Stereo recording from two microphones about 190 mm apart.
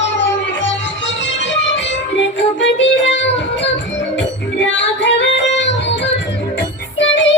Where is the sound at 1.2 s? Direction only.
70° left (ahead or behind).